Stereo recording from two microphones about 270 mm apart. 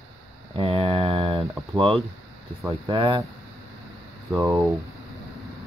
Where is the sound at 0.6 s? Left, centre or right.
Right.